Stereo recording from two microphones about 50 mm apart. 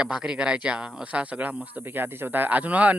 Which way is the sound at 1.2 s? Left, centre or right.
Right.